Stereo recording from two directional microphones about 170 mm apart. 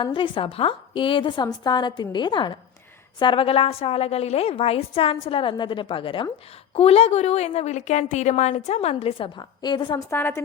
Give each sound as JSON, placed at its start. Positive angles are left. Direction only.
{"t": 0.0, "sound": "a woman's voice", "side_deg": 30}
{"t": 10.1, "sound": "a woman's voice", "side_deg": 15}